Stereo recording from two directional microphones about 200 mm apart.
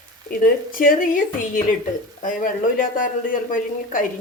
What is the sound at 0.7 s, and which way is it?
Speech, 45° left (ahead or behind).